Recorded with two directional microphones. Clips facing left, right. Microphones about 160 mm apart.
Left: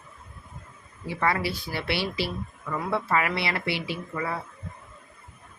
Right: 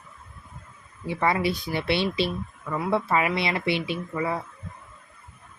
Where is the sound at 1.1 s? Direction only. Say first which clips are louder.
Right 3 dB; 20° right (ahead or behind).